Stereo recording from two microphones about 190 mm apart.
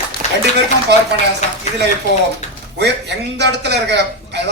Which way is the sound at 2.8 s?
65° right (ahead or behind).